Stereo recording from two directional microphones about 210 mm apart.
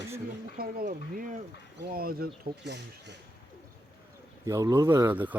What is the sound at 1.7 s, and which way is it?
Speech, 50° right (ahead or behind).